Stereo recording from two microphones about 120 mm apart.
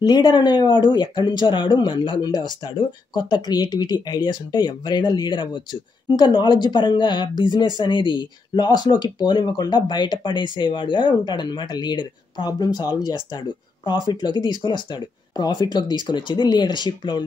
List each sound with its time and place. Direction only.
0.0 s speech: 40° left (ahead or behind)